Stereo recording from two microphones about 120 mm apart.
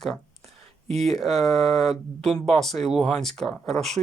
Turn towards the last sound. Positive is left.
turn(degrees=0)  # may be behind; listen again after turning